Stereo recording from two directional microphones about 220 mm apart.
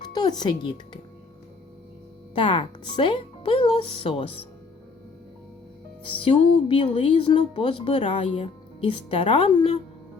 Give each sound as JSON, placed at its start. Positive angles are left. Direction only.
{"t": 0.1, "sound": "speech", "side_deg": 20}
{"t": 2.3, "sound": "speech", "side_deg": 25}
{"t": 6.1, "sound": "speech", "side_deg": 25}